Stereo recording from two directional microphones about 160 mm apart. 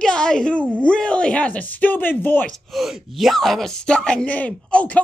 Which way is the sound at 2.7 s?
Centre (ahead or behind).